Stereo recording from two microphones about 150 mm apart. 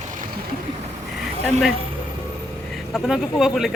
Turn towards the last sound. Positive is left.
turn(degrees=0)  # may be behind; listen again after turning